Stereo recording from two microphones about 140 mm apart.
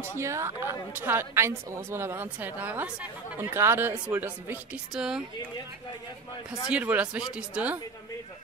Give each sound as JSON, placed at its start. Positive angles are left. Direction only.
{"t": 0.0, "sound": "a woman's voice", "side_deg": -20}
{"t": 4.9, "sound": "speech", "side_deg": -5}
{"t": 6.7, "sound": "a woman's voice", "side_deg": -10}